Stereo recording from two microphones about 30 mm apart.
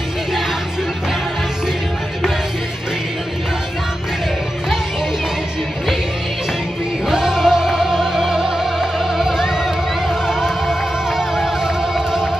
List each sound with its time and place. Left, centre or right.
7.1 s music: centre